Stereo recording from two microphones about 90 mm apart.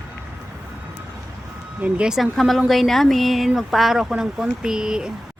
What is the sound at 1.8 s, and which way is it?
Speech, 15° right (ahead or behind).